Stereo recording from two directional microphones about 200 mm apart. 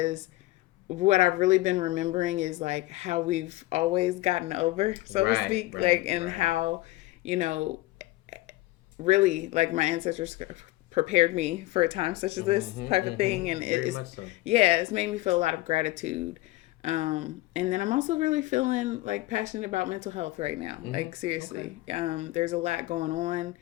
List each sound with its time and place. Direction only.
0.9 s speech: 35° right (ahead or behind)
7.2 s a sound: 35° right (ahead or behind)
9.0 s speech: 35° right (ahead or behind)